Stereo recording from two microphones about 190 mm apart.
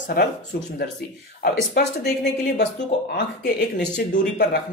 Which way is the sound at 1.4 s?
55° left (ahead or behind).